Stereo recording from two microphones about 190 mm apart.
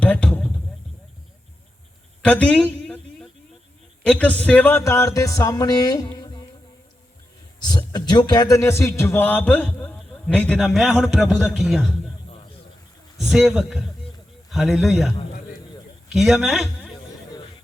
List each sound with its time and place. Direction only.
0.0 s a sound: 5° left (ahead or behind)
2.2 s a sound: 5° left (ahead or behind)
4.0 s a man's voice: 5° left (ahead or behind); by 6.4 s 25° left (ahead or behind)
7.6 s a man's voice: 20° left (ahead or behind); by 12.1 s centre (ahead or behind)
13.1 s a man's voice: centre (ahead or behind)
16.1 s a man's voice: centre (ahead or behind)